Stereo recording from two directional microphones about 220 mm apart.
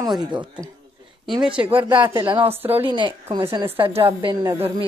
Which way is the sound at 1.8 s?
20° right (ahead or behind).